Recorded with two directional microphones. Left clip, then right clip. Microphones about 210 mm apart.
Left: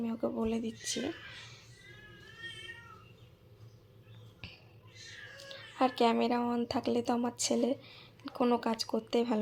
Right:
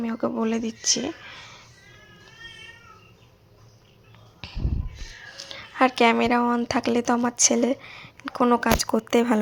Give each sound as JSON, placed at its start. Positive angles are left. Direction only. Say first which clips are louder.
{"t": 0.0, "sound": "speech", "louder": "right 8 dB", "side_deg": -15}
{"t": 5.5, "sound": "speech", "louder": "right 10 dB", "side_deg": -20}